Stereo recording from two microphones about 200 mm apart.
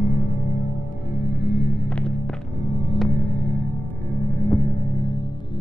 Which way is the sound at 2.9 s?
5° left (ahead or behind).